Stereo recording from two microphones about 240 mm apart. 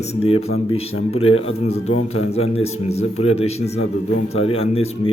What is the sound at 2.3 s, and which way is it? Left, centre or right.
A man's voice, left.